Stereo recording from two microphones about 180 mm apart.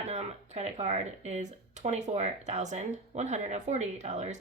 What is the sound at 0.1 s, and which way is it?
Speech, 35° right (ahead or behind).